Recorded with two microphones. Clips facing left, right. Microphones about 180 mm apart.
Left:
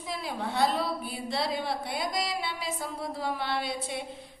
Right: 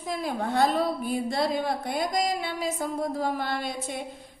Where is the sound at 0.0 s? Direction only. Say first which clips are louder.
Right 5 dB; 45° right (ahead or behind).